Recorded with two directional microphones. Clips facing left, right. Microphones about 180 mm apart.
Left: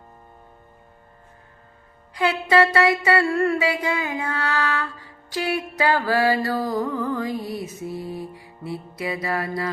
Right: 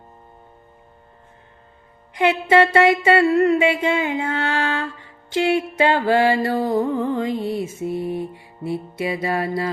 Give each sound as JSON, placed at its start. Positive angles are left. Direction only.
{"t": 2.1, "sound": "music", "side_deg": -20}